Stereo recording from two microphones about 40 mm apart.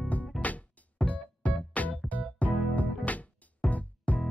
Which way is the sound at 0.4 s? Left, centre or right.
Left.